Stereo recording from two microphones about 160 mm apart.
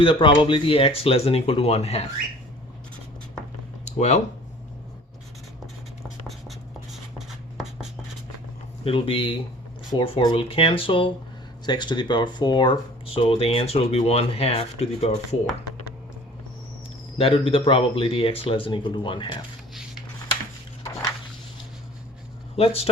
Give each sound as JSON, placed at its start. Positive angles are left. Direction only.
{"t": 0.0, "sound": "speech", "side_deg": 30}
{"t": 3.8, "sound": "speech", "side_deg": 45}
{"t": 6.2, "sound": "writing", "side_deg": 0}
{"t": 8.8, "sound": "speech", "side_deg": 35}
{"t": 17.2, "sound": "speech", "side_deg": 35}
{"t": 20.8, "sound": "a sound", "side_deg": 15}
{"t": 22.5, "sound": "speech", "side_deg": 35}